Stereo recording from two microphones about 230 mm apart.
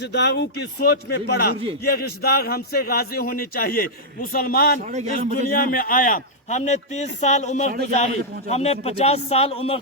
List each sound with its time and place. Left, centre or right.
0.1 s a man's voice: left
4.9 s a man's voice: right
5.3 s a man's voice: left